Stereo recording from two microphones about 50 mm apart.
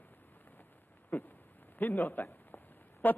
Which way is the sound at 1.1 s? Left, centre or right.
Left.